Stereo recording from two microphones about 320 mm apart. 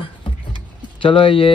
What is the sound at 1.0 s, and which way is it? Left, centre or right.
Speech, centre.